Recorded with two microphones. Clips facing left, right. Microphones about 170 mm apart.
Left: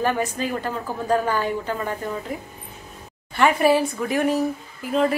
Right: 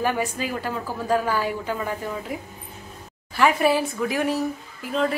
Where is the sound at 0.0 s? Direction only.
10° right (ahead or behind).